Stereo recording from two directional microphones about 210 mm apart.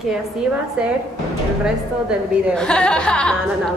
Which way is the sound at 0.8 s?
5° right (ahead or behind).